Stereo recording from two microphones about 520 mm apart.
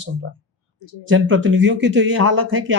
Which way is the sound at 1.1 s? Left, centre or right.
Right.